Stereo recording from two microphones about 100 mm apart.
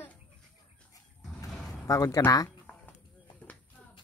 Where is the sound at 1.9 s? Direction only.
35° left (ahead or behind).